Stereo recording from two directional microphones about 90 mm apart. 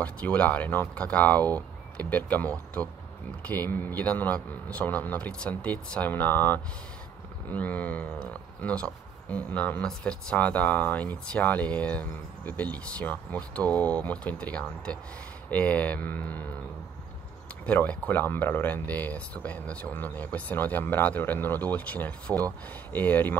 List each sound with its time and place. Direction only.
0.0 s speech: 15° left (ahead or behind)
17.6 s speech: 15° left (ahead or behind)